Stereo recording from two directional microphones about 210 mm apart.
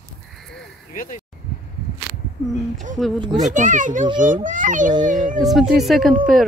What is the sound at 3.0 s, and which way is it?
Speech, centre (ahead or behind).